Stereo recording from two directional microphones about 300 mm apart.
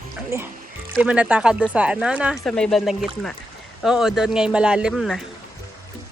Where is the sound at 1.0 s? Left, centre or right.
Centre.